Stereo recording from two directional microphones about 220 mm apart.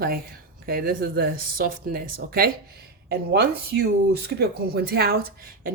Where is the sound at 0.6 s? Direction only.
40° right (ahead or behind).